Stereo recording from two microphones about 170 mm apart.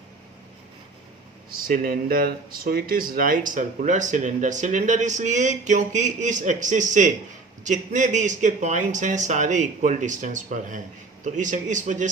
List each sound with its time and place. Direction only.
1.5 s speech: 60° right (ahead or behind)